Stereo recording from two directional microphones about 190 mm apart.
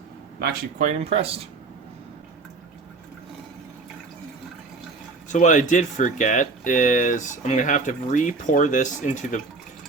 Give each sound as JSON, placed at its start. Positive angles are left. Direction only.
{"t": 0.8, "sound": "speech", "side_deg": -30}
{"t": 5.3, "sound": "speech", "side_deg": 40}